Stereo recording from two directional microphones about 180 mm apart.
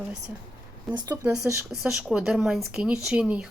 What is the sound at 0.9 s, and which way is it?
Speech, 25° right (ahead or behind).